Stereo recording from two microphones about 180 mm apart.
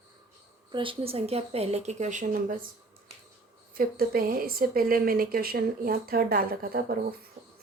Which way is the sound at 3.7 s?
55° right (ahead or behind).